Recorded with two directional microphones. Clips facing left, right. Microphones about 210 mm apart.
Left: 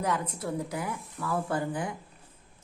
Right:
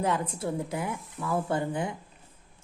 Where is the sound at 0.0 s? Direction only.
25° right (ahead or behind).